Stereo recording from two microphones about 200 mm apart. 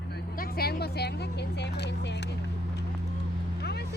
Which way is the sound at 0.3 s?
50° left (ahead or behind).